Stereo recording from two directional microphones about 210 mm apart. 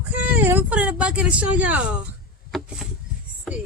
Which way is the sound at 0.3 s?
10° right (ahead or behind).